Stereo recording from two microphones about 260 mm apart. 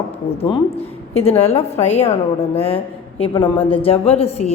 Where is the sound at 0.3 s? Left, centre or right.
Centre.